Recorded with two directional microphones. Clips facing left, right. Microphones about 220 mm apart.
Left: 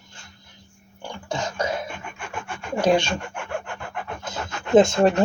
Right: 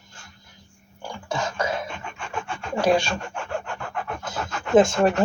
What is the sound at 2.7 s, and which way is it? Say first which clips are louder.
Speech: left 1 dB; 20° left (ahead or behind).